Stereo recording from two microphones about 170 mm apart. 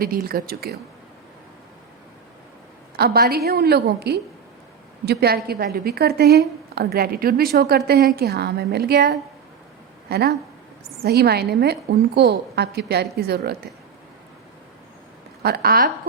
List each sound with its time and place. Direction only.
0.0 s a woman's voice: 60° right (ahead or behind)
2.9 s a woman's voice: 65° right (ahead or behind)
15.4 s a woman's voice: 65° right (ahead or behind)